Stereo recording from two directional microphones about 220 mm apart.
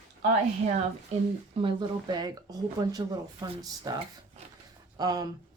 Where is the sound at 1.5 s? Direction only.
20° right (ahead or behind).